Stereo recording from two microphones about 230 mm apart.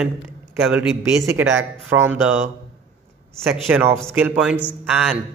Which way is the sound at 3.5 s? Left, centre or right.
Centre.